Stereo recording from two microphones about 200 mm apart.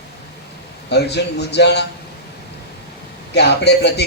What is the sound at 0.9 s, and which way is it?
Speech, 60° left (ahead or behind).